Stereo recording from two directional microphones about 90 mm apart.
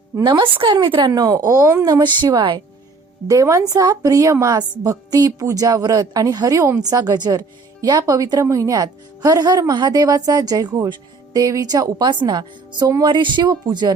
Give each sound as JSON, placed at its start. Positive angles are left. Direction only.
{"t": 0.2, "sound": "a woman's voice", "side_deg": -60}
{"t": 2.0, "sound": "a woman's voice", "side_deg": -55}
{"t": 3.2, "sound": "a woman's voice", "side_deg": -40}
{"t": 13.0, "sound": "speech", "side_deg": -60}